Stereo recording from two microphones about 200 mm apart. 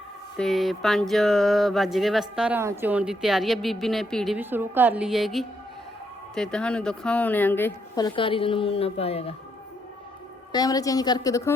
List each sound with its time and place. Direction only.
0.3 s speech: centre (ahead or behind)
4.4 s a woman's voice: 10° right (ahead or behind); by 9.3 s 30° left (ahead or behind)
10.5 s speech: 20° left (ahead or behind)